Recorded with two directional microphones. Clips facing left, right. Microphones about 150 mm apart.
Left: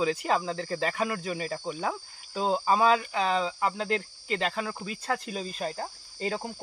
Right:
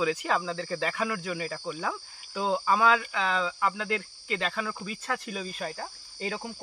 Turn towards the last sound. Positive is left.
turn(degrees=40)  # may be behind; listen again after turning